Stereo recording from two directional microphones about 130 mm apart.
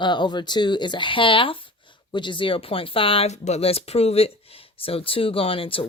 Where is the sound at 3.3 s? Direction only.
60° left (ahead or behind); by 5.8 s 45° left (ahead or behind).